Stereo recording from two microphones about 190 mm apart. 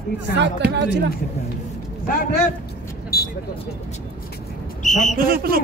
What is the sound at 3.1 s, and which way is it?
Vehicle, 55° left (ahead or behind).